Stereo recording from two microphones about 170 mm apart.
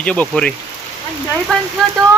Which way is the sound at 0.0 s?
5° left (ahead or behind).